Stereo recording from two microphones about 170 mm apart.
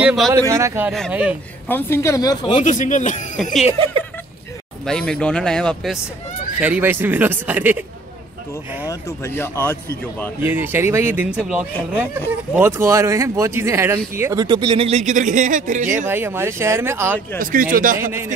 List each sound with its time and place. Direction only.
0.0 s speech: centre (ahead or behind)
0.3 s speech: 15° right (ahead or behind)
1.7 s speech: 15° left (ahead or behind)
2.5 s speech: 45° left (ahead or behind)
4.8 s speech: 5° left (ahead or behind)
6.6 s speech: 10° right (ahead or behind)
8.8 s speech: 15° left (ahead or behind)
10.4 s speech: 10° right (ahead or behind)
14.9 s a man's voice: 45° right (ahead or behind)
16.1 s speech: 15° right (ahead or behind)
17.4 s a man's voice: 55° right (ahead or behind)